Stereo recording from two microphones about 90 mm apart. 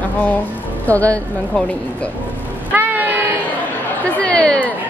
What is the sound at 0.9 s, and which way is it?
Speech, 15° left (ahead or behind).